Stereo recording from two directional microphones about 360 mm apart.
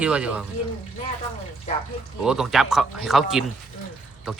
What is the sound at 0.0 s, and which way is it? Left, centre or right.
Speech, centre.